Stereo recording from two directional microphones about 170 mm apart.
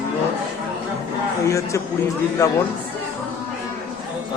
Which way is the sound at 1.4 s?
20° left (ahead or behind).